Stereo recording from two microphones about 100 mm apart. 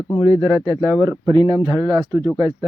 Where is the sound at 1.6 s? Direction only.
40° right (ahead or behind).